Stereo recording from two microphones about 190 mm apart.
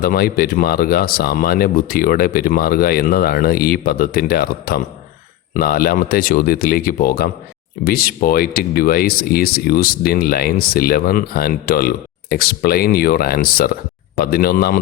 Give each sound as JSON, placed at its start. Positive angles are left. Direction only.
{"t": 0.0, "sound": "speech", "side_deg": 50}